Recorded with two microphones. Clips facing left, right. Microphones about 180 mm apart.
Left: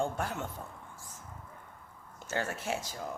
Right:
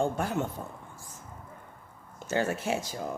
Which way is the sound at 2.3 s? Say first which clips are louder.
Right 6 dB; 20° right (ahead or behind).